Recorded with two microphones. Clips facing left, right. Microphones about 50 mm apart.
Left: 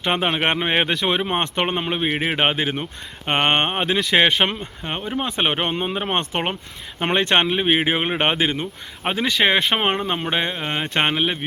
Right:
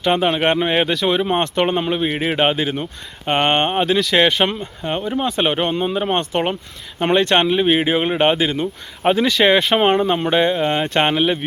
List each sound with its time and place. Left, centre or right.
0.1 s speech: centre